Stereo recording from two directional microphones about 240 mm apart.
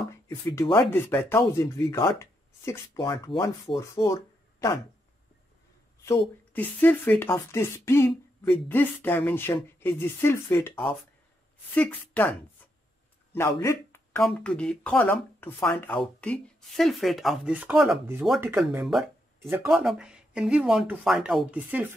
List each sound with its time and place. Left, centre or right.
0.1 s speech: centre
6.0 s speech: centre
11.7 s speech: centre
13.3 s a sound: centre
14.2 s speech: centre